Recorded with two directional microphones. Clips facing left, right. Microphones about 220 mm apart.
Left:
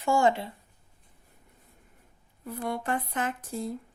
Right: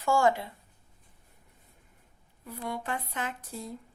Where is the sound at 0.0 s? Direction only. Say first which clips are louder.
Left 1 dB; 20° left (ahead or behind).